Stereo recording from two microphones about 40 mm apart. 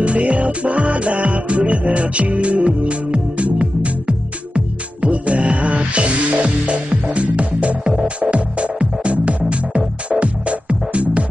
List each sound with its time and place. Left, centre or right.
0.0 s music: right